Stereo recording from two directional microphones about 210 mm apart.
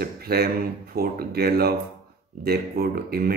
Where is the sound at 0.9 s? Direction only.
45° right (ahead or behind).